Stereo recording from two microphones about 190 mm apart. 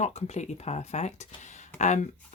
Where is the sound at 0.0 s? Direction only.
35° left (ahead or behind).